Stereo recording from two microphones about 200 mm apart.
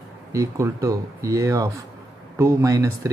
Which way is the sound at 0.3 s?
15° right (ahead or behind).